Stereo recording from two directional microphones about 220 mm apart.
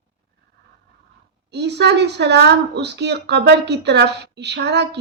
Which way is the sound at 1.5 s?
50° right (ahead or behind).